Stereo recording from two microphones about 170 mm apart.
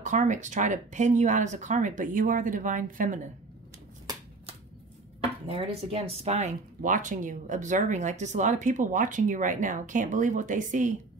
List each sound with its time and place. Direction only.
0.0 s speech: 45° right (ahead or behind)
5.5 s speech: 35° right (ahead or behind)